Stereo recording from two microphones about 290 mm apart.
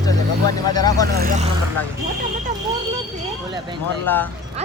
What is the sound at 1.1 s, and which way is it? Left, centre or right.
Speech, right.